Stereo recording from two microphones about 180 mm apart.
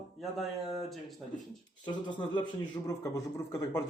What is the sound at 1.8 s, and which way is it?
Speech, 25° left (ahead or behind).